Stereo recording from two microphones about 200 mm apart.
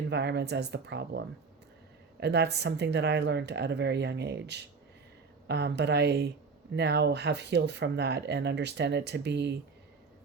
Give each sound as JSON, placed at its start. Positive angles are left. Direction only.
{"t": 0.1, "sound": "speech", "side_deg": -60}
{"t": 2.2, "sound": "speech", "side_deg": -55}